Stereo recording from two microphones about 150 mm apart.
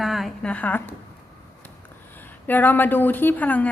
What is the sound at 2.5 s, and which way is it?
A woman's voice, 10° left (ahead or behind).